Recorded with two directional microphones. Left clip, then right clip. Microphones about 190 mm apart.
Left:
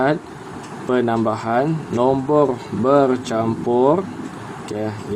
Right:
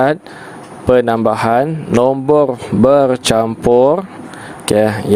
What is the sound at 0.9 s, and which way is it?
Speech, 55° right (ahead or behind).